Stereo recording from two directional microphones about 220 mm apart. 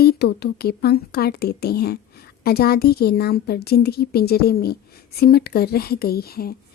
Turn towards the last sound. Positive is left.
turn(degrees=45)  # may be behind; listen again after turning